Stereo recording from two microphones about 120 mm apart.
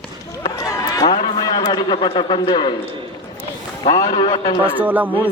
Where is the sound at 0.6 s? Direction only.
30° left (ahead or behind).